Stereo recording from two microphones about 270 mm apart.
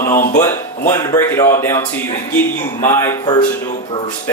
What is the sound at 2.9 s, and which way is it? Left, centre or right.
Speech, centre.